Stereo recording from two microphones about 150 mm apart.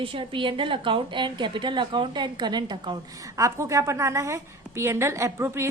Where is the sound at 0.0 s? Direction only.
35° right (ahead or behind).